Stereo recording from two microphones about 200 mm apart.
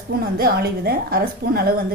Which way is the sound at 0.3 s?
50° right (ahead or behind).